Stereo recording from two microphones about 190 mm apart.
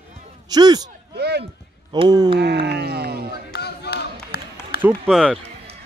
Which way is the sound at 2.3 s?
60° right (ahead or behind).